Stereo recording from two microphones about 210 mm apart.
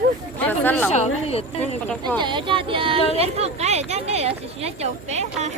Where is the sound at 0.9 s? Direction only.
30° left (ahead or behind).